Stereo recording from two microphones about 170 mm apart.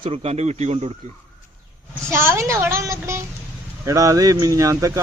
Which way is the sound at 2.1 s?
15° right (ahead or behind).